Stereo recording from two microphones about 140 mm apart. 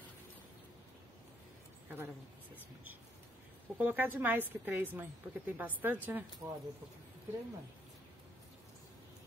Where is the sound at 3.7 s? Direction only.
10° right (ahead or behind).